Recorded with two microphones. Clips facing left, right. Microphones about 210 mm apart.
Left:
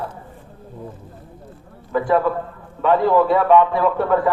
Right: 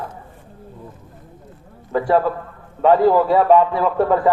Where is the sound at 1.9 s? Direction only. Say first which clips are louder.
Right 1 dB; 35° right (ahead or behind).